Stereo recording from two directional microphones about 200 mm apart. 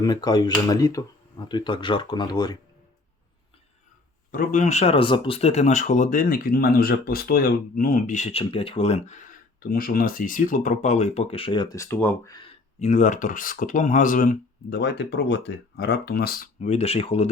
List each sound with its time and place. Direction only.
0.0 s speech: 20° left (ahead or behind)
4.3 s speech: 45° left (ahead or behind); by 12.5 s 20° left (ahead or behind)
12.8 s speech: 40° left (ahead or behind)